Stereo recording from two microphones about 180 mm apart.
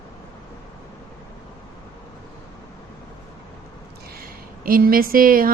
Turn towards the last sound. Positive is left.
turn(degrees=-50)  # may be behind; listen again after turning